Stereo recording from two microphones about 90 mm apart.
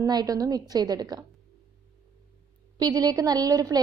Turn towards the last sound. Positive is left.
turn(degrees=-45)  # may be behind; listen again after turning